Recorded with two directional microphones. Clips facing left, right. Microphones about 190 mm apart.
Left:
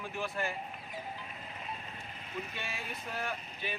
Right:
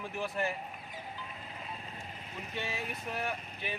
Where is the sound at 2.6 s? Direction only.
25° right (ahead or behind).